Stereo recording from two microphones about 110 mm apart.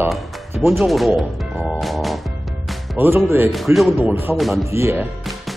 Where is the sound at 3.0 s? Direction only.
20° right (ahead or behind).